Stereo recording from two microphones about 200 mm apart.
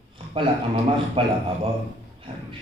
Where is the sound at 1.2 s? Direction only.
25° right (ahead or behind).